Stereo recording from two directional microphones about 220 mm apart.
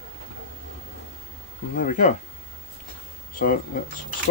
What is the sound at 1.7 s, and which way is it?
Speech, 35° left (ahead or behind).